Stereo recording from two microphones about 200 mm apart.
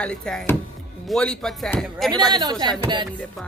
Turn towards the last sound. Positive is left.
turn(degrees=-20)  # may be behind; listen again after turning